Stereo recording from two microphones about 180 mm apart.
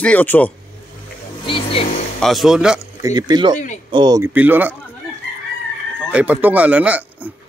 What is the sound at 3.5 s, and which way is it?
Speech, 45° left (ahead or behind).